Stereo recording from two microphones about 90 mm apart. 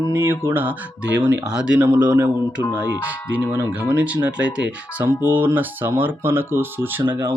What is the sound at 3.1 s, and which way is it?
Speech, 20° right (ahead or behind).